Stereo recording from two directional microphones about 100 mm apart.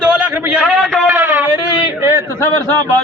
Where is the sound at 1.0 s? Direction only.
20° right (ahead or behind).